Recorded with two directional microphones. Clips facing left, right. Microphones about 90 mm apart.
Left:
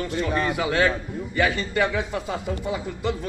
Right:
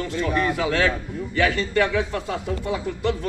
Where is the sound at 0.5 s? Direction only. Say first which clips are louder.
Even; 10° left (ahead or behind).